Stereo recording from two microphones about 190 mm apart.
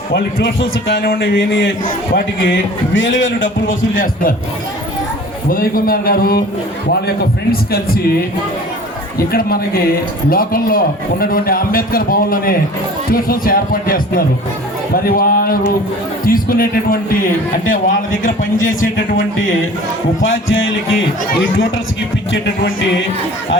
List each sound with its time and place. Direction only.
0.1 s a man's voice: 50° left (ahead or behind)
2.1 s a man's voice: 70° left (ahead or behind); by 3.8 s 90° left
3.9 s a man's voice: 45° left (ahead or behind)
5.5 s a man's voice: 50° left (ahead or behind)
7.5 s a man's voice: 50° left (ahead or behind)
9.1 s a man's voice: 50° left (ahead or behind)
20.2 s a man's voice: 90° left